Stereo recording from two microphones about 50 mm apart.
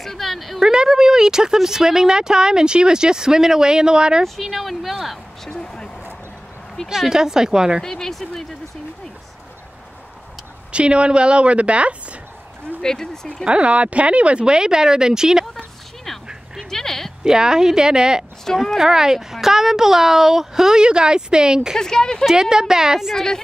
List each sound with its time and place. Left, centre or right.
0.0 s a woman's voice: centre
0.7 s speech: centre
4.2 s speech: centre
5.5 s a sound: centre
6.9 s speech: centre
7.8 s speech: centre
10.7 s a woman's voice: right
12.8 s speech: centre
13.5 s speech: right
16.7 s speech: centre
17.2 s speech: centre
21.7 s speech: centre
22.2 s speech: centre
23.1 s speech: centre